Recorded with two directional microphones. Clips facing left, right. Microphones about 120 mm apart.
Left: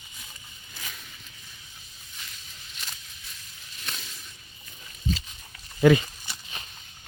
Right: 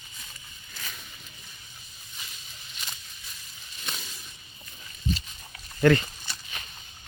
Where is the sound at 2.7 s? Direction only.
Centre (ahead or behind).